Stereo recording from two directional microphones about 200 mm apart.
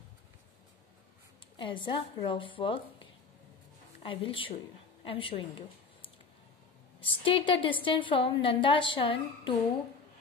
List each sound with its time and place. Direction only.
1.6 s a woman's voice: 25° left (ahead or behind)
7.0 s a woman's voice: 25° left (ahead or behind)